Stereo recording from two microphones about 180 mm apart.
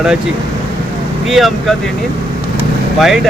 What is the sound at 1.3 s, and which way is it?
Speech, centre (ahead or behind).